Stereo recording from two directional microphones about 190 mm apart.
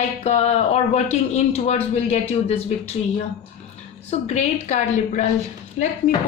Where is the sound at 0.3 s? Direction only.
35° left (ahead or behind).